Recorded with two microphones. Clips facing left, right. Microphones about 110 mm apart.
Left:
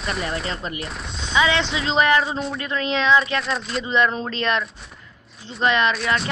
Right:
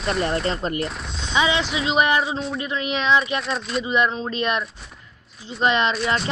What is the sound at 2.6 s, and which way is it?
Speech, 15° right (ahead or behind).